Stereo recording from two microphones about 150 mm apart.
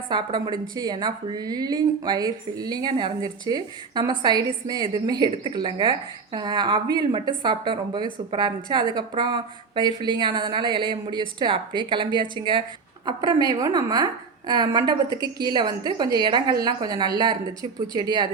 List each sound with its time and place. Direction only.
0.1 s a woman's voice: 30° right (ahead or behind)